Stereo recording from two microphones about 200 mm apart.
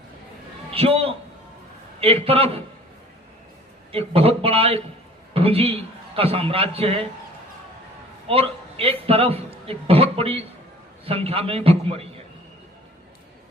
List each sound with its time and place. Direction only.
0.7 s a man's voice: 30° right (ahead or behind)
3.9 s a man's voice: 30° right (ahead or behind)
8.3 s a man's voice: 30° right (ahead or behind)